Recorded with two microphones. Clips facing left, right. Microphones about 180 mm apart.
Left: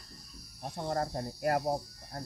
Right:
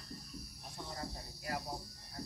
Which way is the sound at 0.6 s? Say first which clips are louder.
Left 13 dB; 60° left (ahead or behind).